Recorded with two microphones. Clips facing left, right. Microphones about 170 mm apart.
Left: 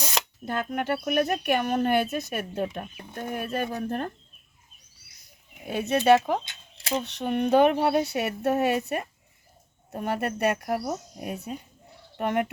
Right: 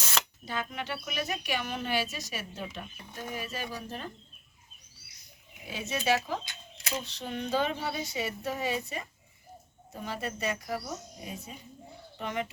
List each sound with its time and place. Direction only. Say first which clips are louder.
0.4 s speech: left 8 dB; 55° left (ahead or behind)
5.6 s speech: left 9 dB; 60° left (ahead or behind)